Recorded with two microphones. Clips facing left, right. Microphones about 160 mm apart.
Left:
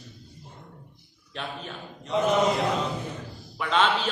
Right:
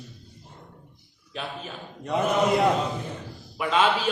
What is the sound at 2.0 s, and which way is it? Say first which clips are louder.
Mantra: even; 55° right (ahead or behind).